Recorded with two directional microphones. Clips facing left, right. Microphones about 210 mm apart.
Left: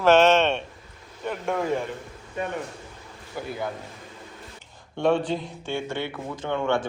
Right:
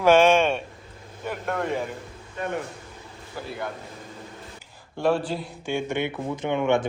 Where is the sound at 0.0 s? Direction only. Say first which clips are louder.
Even; 10° right (ahead or behind).